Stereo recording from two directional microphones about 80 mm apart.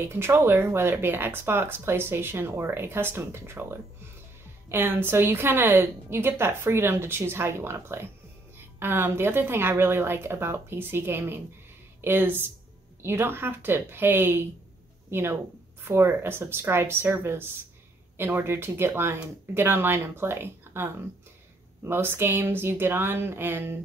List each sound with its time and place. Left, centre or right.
0.0 s speech: right
4.6 s a woman's voice: right